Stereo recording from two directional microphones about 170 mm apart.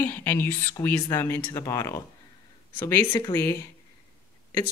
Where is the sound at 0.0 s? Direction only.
10° left (ahead or behind).